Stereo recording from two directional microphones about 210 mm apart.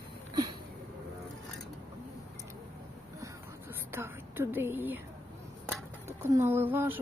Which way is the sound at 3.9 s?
10° right (ahead or behind).